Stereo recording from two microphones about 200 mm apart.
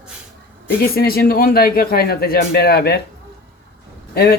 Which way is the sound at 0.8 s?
50° left (ahead or behind).